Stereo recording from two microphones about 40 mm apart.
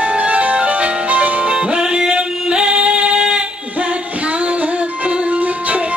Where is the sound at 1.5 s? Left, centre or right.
Right.